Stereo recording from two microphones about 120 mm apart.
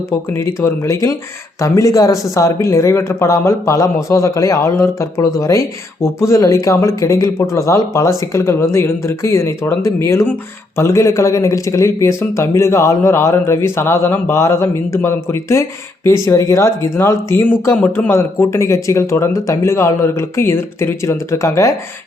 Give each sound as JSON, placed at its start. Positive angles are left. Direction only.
{"t": 0.3, "sound": "speech", "side_deg": 20}